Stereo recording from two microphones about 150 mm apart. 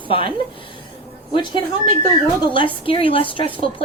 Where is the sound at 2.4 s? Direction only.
35° left (ahead or behind).